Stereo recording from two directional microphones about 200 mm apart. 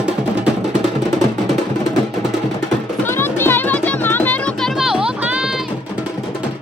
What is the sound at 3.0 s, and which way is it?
Music, 10° left (ahead or behind).